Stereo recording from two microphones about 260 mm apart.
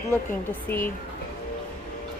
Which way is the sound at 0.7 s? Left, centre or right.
Centre.